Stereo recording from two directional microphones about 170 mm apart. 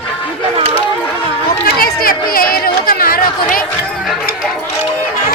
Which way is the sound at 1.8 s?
60° left (ahead or behind).